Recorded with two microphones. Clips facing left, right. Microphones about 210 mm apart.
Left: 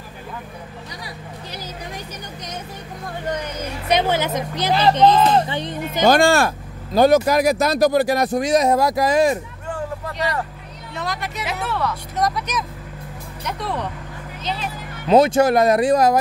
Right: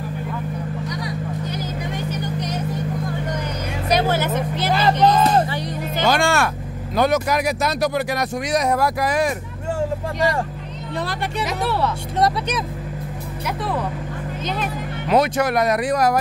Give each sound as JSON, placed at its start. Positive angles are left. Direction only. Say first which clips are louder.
{"t": 3.9, "sound": "music", "louder": "even", "side_deg": 15}
{"t": 5.5, "sound": "speech", "louder": "even", "side_deg": 20}
{"t": 6.0, "sound": "speech", "louder": "left 4 dB", "side_deg": 35}
{"t": 11.0, "sound": "speech", "louder": "right 2 dB", "side_deg": -30}
{"t": 14.4, "sound": "speech", "louder": "right 1 dB", "side_deg": -50}
{"t": 15.0, "sound": "speech", "louder": "left 5 dB", "side_deg": 25}